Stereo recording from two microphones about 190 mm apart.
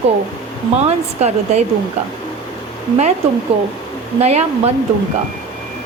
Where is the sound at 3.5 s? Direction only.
30° right (ahead or behind).